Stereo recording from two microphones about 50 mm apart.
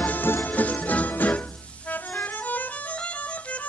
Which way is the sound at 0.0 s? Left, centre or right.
Left.